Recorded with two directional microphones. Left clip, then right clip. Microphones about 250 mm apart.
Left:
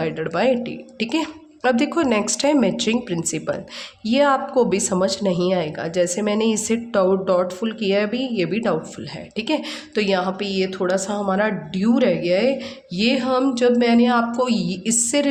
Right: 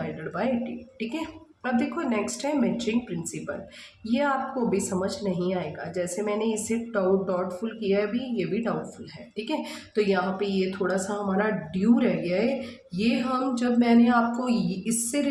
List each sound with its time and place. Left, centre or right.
0.0 s speech: left
4.0 s speech: left